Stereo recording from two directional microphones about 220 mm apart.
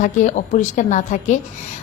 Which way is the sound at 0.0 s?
35° left (ahead or behind).